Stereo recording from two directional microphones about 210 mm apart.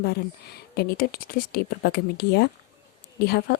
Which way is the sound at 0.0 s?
50° left (ahead or behind).